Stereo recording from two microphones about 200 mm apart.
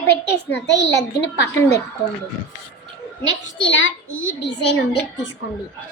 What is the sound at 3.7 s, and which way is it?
A child's voice, 70° left (ahead or behind).